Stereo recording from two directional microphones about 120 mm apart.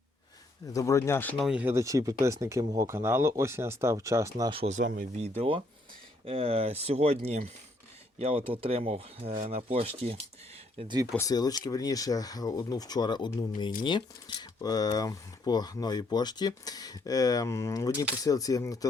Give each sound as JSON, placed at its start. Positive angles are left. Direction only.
{"t": 0.7, "sound": "speech", "side_deg": 25}
{"t": 1.4, "sound": "speech", "side_deg": -5}
{"t": 1.6, "sound": "speech", "side_deg": -25}
{"t": 4.6, "sound": "speech", "side_deg": -85}
{"t": 8.2, "sound": "speech", "side_deg": -50}
{"t": 9.4, "sound": "speech", "side_deg": -65}
{"t": 10.8, "sound": "speech", "side_deg": -40}
{"t": 11.2, "sound": "speech", "side_deg": 30}